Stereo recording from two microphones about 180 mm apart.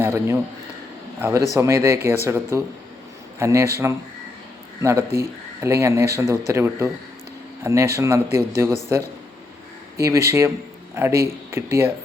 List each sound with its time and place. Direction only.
0.0 s speech: 15° right (ahead or behind)
10.0 s speech: 15° right (ahead or behind)